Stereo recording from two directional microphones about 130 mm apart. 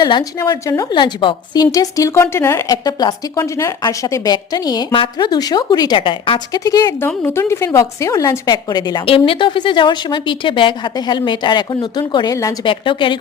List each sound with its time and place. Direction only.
0.0 s a woman's voice: 30° left (ahead or behind)
6.7 s a woman's voice: 30° left (ahead or behind)
9.0 s a woman's voice: 45° left (ahead or behind); by 12.5 s 25° left (ahead or behind)
12.6 s a woman's voice: 40° left (ahead or behind)